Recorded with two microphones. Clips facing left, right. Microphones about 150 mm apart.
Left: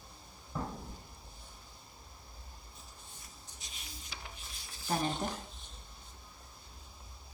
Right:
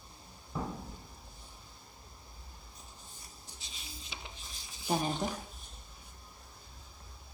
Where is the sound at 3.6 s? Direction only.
25° right (ahead or behind).